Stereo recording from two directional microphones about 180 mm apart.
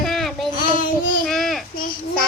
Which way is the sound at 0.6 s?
50° left (ahead or behind).